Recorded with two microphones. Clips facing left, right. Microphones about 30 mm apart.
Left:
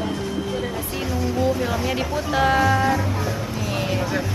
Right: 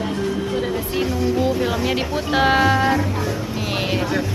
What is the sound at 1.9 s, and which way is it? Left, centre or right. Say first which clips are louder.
Speech: right 2 dB; right.